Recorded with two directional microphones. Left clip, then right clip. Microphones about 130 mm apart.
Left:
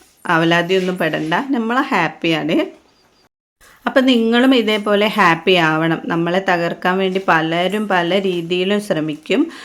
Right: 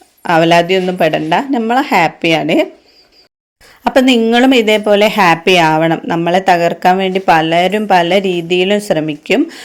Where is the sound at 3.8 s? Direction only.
30° right (ahead or behind).